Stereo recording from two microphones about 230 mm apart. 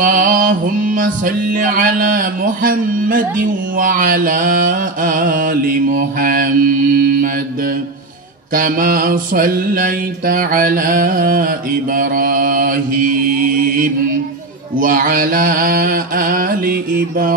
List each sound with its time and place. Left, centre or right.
0.0 s mantra: right
8.5 s mantra: right
14.8 s mantra: right